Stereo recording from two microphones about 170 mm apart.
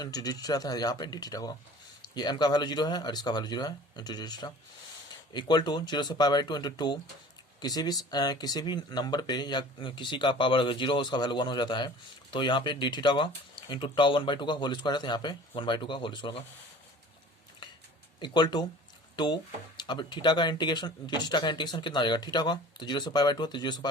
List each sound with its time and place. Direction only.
0.0 s speech: 20° left (ahead or behind)
18.2 s speech: 25° left (ahead or behind)